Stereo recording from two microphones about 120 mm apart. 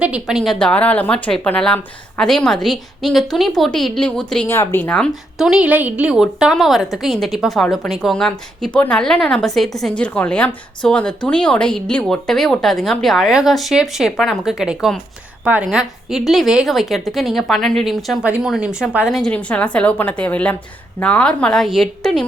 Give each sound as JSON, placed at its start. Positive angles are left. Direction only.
{"t": 0.0, "sound": "a woman's voice", "side_deg": -5}
{"t": 0.6, "sound": "a woman's voice", "side_deg": 10}
{"t": 4.4, "sound": "a woman's voice", "side_deg": 20}
{"t": 5.4, "sound": "a woman's voice", "side_deg": -5}
{"t": 19.2, "sound": "a woman's voice", "side_deg": 10}